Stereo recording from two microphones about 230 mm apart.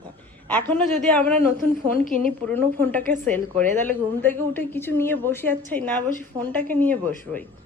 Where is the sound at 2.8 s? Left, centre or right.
Centre.